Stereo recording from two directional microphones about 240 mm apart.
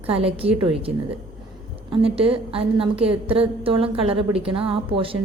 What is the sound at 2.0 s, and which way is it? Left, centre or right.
A woman's voice, right.